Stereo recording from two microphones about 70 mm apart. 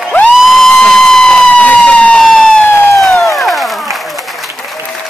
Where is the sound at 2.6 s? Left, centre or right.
Left.